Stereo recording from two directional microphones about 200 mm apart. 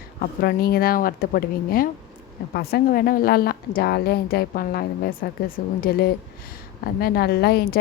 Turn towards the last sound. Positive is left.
turn(degrees=55)  # may be behind; listen again after turning